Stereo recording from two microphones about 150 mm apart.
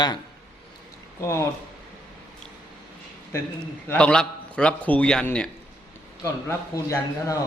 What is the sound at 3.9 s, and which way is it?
A man's voice, 5° left (ahead or behind).